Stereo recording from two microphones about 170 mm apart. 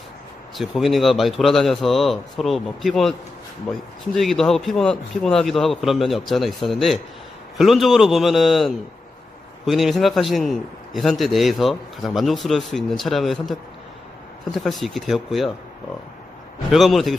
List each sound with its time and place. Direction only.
0.6 s a man's voice: centre (ahead or behind)
16.7 s a man's voice: centre (ahead or behind)